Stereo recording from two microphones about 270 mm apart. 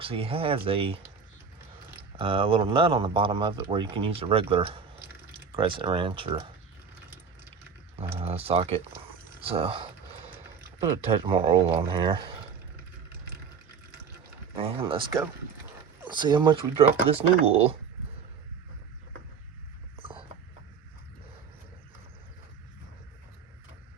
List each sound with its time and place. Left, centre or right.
0.0 s speech: centre
2.1 s speech: centre
8.1 s speech: right
10.8 s speech: centre
14.6 s speech: right
20.0 s a sound: centre